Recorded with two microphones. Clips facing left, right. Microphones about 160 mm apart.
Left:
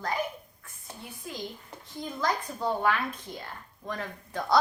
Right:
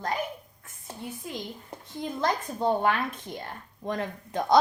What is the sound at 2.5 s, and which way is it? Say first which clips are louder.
A woman's voice: right 4 dB; 25° right (ahead or behind).